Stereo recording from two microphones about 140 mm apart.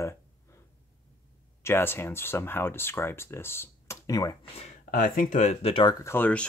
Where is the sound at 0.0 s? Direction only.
20° left (ahead or behind).